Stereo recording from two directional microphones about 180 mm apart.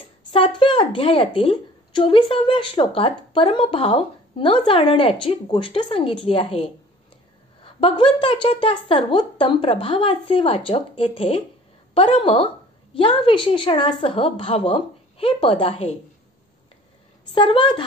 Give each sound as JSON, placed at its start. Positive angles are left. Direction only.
{"t": 0.3, "sound": "a woman's voice", "side_deg": 30}
{"t": 17.3, "sound": "a woman's voice", "side_deg": 30}